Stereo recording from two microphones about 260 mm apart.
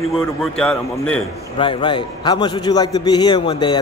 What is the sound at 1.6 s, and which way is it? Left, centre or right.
A man's voice, centre.